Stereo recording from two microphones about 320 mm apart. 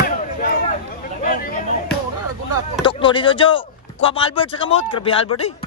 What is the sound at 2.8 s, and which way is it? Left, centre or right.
Speech, centre.